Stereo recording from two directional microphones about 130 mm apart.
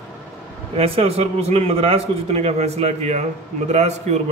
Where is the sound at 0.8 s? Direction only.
50° right (ahead or behind).